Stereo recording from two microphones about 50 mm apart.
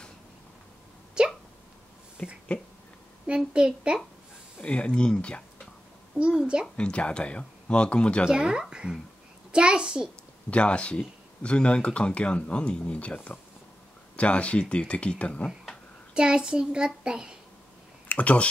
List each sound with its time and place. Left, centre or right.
1.2 s hiccup: centre
2.2 s speech: left
3.3 s a woman's voice: centre
4.6 s speech: left
6.8 s speech: left
8.3 s a child's voice: centre
10.5 s speech: left
16.2 s a child's voice: centre
18.0 s speech: left